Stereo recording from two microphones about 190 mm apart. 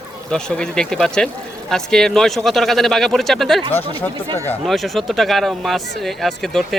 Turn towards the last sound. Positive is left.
turn(degrees=0)  # may be behind; listen again after turning